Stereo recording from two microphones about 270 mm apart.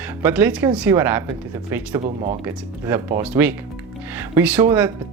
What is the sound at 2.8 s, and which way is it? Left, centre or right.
Speech, centre.